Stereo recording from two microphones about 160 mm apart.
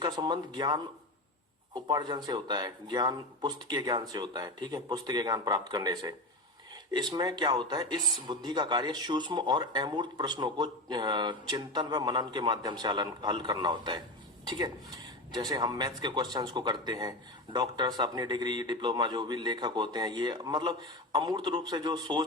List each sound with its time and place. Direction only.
0.0 s speech: 25° right (ahead or behind)